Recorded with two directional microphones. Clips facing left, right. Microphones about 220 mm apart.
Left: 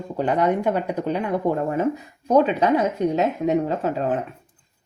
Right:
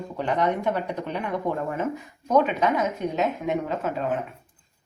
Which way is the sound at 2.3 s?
35° left (ahead or behind).